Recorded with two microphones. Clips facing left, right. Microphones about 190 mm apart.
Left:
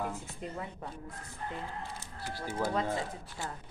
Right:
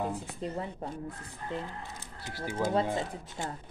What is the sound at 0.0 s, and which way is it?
Speech, 30° right (ahead or behind).